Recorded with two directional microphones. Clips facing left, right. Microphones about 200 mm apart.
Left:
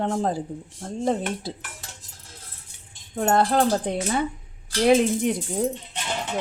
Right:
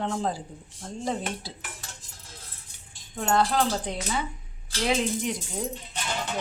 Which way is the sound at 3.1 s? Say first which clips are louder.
Left 4 dB; 45° left (ahead or behind).